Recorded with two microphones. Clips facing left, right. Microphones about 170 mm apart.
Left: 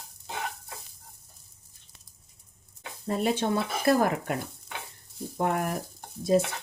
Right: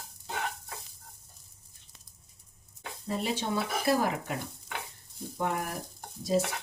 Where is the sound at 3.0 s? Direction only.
55° left (ahead or behind).